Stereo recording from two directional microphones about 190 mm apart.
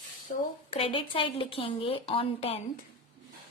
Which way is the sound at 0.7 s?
30° left (ahead or behind).